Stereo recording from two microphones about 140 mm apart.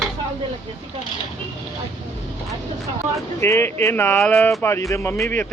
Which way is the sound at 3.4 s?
20° left (ahead or behind).